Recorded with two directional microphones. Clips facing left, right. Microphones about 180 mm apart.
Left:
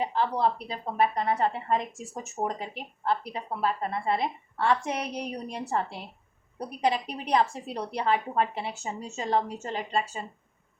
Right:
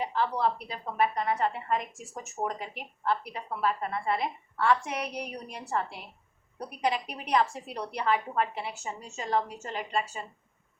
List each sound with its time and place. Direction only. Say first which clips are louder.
0.0 s a woman's voice: left 2 dB; 25° left (ahead or behind)